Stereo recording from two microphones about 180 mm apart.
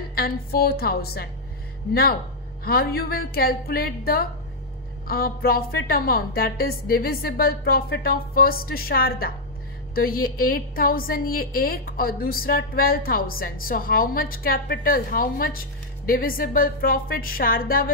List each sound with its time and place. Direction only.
0.1 s a woman's voice: 55° left (ahead or behind)
2.6 s a woman's voice: 55° left (ahead or behind)